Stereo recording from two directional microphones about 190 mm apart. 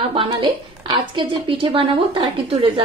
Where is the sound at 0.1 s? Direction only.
25° right (ahead or behind).